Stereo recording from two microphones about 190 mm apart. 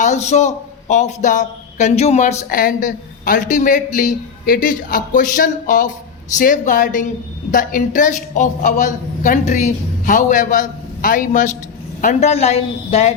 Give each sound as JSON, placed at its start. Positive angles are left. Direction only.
{"t": 0.0, "sound": "a man's voice", "side_deg": 40}